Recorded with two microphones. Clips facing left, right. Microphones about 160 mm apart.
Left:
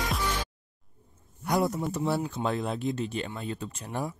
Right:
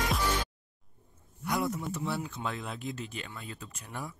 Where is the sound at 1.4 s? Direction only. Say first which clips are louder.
Left 5 dB; 40° left (ahead or behind).